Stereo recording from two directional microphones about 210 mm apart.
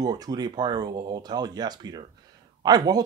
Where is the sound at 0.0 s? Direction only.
20° right (ahead or behind).